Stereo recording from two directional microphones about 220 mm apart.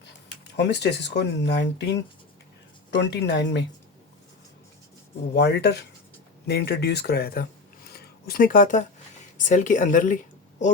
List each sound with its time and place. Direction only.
0.0 s speech: 50° left (ahead or behind)
2.9 s speech: 50° left (ahead or behind)
5.3 s speech: 50° left (ahead or behind)
7.9 s a sound: 45° left (ahead or behind)
9.4 s speech: 35° left (ahead or behind)